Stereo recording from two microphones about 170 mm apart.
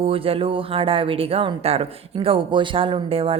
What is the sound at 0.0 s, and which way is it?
Speech, 35° right (ahead or behind).